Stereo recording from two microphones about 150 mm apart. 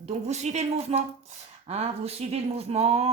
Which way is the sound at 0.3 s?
50° right (ahead or behind).